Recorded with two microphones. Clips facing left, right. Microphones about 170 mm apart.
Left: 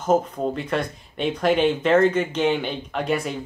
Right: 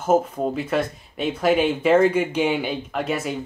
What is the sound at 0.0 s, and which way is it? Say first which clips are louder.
Speech: right 1 dB; 5° right (ahead or behind).